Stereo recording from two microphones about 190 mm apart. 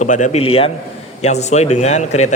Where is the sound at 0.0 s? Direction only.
40° left (ahead or behind).